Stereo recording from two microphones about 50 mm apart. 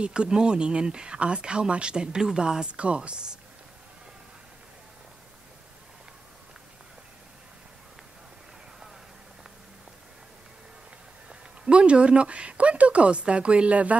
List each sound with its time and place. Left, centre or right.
0.0 s speech: centre
11.2 s speech: right